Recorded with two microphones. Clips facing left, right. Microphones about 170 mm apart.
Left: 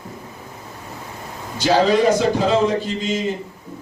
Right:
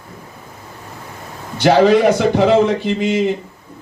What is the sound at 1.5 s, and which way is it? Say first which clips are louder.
A man's voice: right 5 dB; 65° right (ahead or behind).